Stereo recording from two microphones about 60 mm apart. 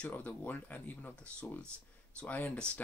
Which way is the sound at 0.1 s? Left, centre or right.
Left.